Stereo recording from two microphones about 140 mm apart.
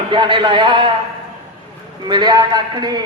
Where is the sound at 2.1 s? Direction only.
30° right (ahead or behind).